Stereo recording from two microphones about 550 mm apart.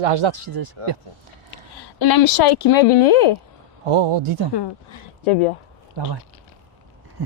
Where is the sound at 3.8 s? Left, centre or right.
Right.